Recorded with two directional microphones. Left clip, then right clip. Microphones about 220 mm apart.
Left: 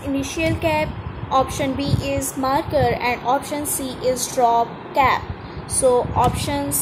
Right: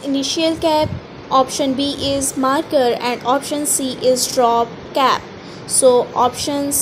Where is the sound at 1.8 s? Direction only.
45° right (ahead or behind).